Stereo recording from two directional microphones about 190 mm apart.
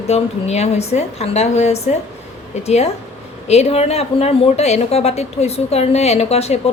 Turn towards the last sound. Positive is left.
turn(degrees=35)  # may be behind; listen again after turning